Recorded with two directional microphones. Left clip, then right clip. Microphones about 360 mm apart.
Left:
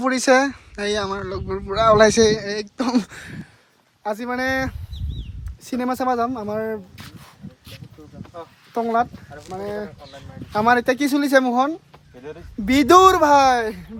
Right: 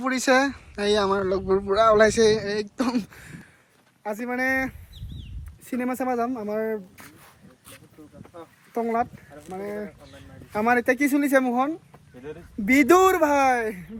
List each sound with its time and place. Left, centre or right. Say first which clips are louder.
0.0 s speech: left 4 dB; centre
3.0 s a sound: left 7 dB; left
4.0 s speech: left 3 dB; centre
8.7 s speech: left 5 dB; centre